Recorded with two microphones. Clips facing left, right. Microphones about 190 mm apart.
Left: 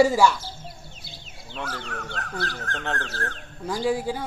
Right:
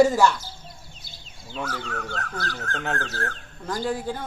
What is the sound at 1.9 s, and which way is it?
Speech, 35° right (ahead or behind).